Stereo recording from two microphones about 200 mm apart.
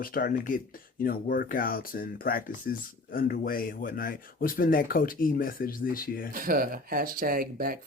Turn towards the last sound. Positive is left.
turn(degrees=-45)  # may be behind; listen again after turning